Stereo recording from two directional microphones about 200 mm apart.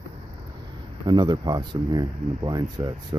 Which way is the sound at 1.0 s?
25° right (ahead or behind).